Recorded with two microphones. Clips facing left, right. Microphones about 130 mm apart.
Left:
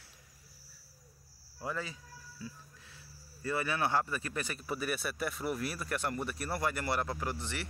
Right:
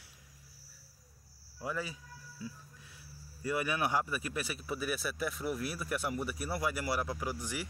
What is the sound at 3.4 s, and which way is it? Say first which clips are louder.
A man's voice: even; 15° right (ahead or behind).